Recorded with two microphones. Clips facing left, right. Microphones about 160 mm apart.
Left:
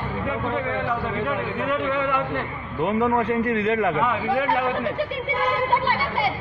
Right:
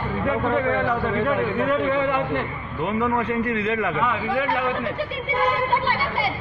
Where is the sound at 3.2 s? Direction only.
40° left (ahead or behind).